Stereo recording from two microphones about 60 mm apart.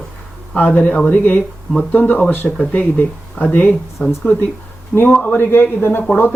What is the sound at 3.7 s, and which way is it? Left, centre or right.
Speech, centre.